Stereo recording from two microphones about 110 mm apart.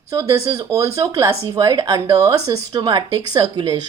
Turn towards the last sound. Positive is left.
turn(degrees=-40)  # may be behind; listen again after turning